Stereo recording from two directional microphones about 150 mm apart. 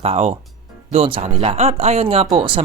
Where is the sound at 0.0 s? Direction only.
45° right (ahead or behind).